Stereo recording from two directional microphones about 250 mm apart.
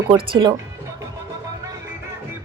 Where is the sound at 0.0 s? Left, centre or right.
Centre.